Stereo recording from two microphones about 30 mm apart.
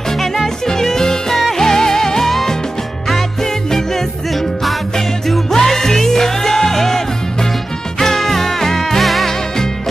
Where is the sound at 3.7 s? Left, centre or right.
Centre.